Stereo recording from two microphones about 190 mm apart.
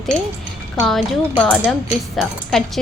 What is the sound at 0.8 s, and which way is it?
A woman's voice, centre (ahead or behind).